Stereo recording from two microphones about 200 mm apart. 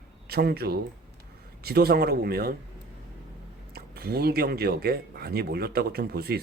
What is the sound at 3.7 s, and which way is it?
Speech, 50° right (ahead or behind).